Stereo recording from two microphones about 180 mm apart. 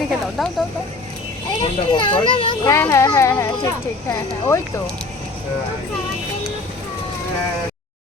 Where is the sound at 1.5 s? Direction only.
25° left (ahead or behind).